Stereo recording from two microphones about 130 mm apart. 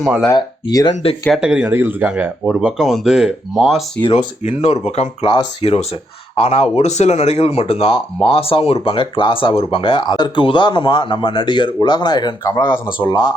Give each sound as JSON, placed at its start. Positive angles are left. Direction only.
{"t": 0.0, "sound": "speech", "side_deg": -5}
{"t": 0.3, "sound": "speech", "side_deg": 30}
{"t": 1.4, "sound": "speech", "side_deg": -10}
{"t": 4.4, "sound": "speech", "side_deg": 55}
{"t": 5.6, "sound": "speech", "side_deg": 45}